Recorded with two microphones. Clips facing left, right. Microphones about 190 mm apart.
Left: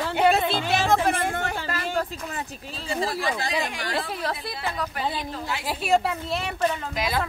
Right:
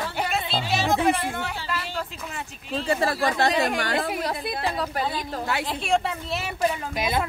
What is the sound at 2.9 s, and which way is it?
Speech, 65° right (ahead or behind).